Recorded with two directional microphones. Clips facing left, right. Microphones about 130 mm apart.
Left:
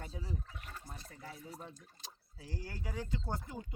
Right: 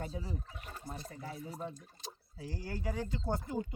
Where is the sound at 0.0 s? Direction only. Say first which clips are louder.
Right 4 dB; 20° right (ahead or behind).